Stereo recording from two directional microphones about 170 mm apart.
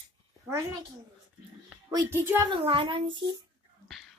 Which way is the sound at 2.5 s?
30° right (ahead or behind).